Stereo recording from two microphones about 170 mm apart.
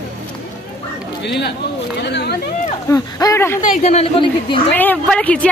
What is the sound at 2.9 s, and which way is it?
Speech, 20° left (ahead or behind).